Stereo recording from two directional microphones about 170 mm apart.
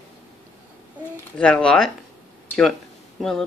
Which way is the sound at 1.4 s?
5° left (ahead or behind).